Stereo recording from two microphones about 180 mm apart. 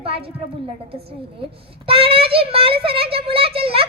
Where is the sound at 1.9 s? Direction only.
30° right (ahead or behind).